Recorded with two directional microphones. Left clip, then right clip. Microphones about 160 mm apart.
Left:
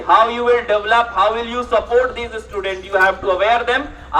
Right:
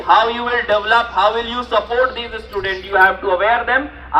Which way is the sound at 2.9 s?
35° left (ahead or behind).